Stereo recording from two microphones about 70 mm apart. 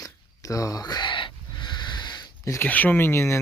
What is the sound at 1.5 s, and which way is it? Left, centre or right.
Snort, left.